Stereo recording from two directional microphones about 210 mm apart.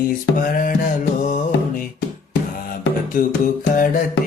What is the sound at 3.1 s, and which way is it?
Music, 40° left (ahead or behind).